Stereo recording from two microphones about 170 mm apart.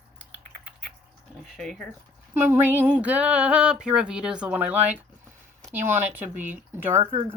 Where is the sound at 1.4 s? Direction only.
Centre (ahead or behind).